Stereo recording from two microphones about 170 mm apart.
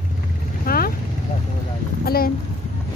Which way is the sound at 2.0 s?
60° left (ahead or behind).